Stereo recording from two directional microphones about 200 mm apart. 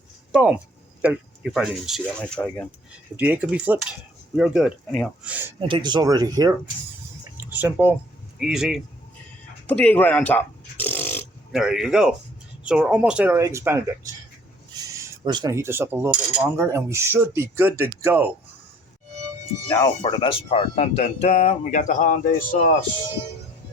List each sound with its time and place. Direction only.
0.3 s speech: 5° right (ahead or behind)
3.2 s speech: 10° right (ahead or behind)
5.5 s speech: 25° right (ahead or behind); by 8.8 s centre (ahead or behind)
9.6 s a sound: 10° left (ahead or behind)
11.5 s speech: 5° right (ahead or behind)
20.0 s speech: 25° left (ahead or behind); by 22.4 s 45° left (ahead or behind)